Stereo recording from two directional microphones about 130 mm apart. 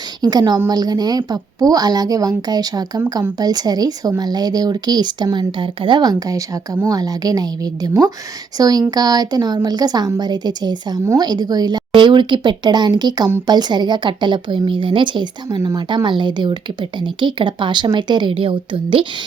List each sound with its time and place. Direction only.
0.2 s a woman's voice: 30° right (ahead or behind)